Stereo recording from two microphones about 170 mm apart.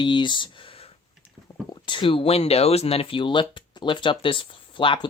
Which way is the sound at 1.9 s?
30° left (ahead or behind).